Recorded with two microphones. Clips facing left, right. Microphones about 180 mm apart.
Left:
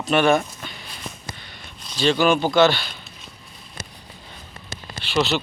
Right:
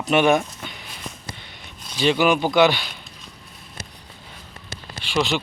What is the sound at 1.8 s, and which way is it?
Speech, 10° right (ahead or behind).